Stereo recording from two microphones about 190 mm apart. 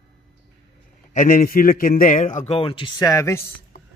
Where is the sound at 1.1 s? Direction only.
45° left (ahead or behind).